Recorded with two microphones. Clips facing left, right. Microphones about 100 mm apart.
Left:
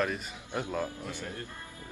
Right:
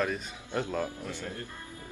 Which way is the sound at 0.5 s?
10° left (ahead or behind).